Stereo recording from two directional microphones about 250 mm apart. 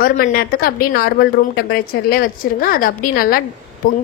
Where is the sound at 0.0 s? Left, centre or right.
Left.